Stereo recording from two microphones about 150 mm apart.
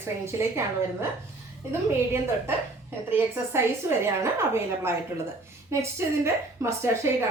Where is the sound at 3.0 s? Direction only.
15° right (ahead or behind).